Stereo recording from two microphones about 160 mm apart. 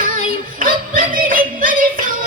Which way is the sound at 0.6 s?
60° right (ahead or behind).